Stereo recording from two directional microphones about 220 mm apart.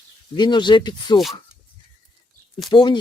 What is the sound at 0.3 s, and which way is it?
Speech, 20° left (ahead or behind).